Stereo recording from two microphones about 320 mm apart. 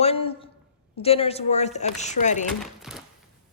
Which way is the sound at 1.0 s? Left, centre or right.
Centre.